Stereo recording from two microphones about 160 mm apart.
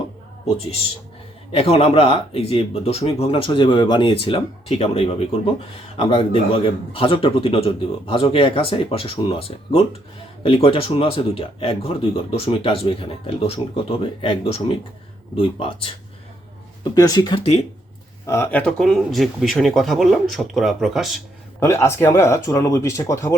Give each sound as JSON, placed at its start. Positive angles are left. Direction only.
{"t": 1.5, "sound": "speech", "side_deg": 35}
{"t": 16.9, "sound": "speech", "side_deg": 25}
{"t": 18.3, "sound": "speech", "side_deg": 15}
{"t": 21.6, "sound": "speech", "side_deg": 15}